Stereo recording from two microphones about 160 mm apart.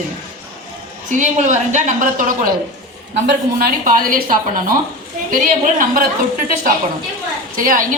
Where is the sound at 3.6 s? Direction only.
60° right (ahead or behind).